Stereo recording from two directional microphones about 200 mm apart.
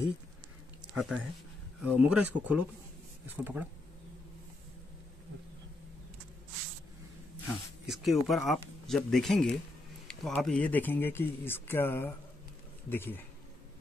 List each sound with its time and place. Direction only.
0.9 s speech: centre (ahead or behind)
7.8 s speech: centre (ahead or behind)